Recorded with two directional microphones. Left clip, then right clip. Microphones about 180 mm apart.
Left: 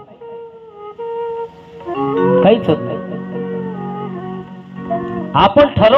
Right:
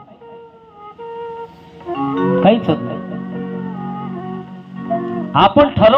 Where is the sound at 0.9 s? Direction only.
45° left (ahead or behind).